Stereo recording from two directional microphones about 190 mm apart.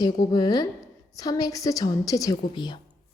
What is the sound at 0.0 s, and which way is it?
Speech, 20° left (ahead or behind).